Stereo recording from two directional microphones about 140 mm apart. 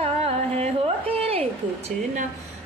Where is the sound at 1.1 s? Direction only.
45° right (ahead or behind).